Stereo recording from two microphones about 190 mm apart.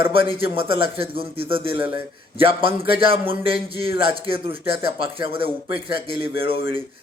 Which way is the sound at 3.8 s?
55° left (ahead or behind).